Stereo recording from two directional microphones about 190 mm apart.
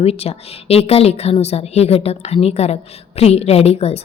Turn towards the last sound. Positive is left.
turn(degrees=35)  # may be behind; listen again after turning